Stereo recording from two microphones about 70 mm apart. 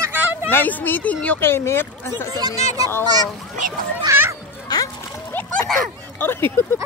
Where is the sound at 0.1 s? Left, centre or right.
Right.